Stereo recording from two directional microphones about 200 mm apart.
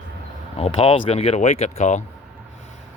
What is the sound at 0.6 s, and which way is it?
Speech, 30° left (ahead or behind).